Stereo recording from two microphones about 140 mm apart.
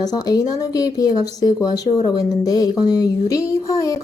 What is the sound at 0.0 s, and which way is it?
A woman's voice, 25° left (ahead or behind).